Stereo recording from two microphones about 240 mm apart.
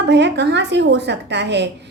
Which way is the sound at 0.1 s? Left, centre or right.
Right.